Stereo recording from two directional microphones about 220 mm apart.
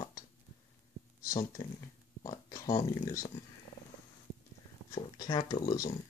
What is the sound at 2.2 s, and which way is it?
Speech, 15° left (ahead or behind).